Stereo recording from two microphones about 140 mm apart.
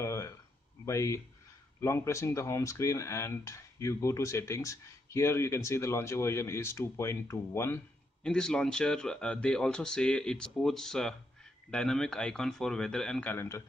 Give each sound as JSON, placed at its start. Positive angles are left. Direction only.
{"t": 0.0, "sound": "a sound", "side_deg": 20}
{"t": 0.8, "sound": "speech", "side_deg": 20}
{"t": 8.2, "sound": "speech", "side_deg": 5}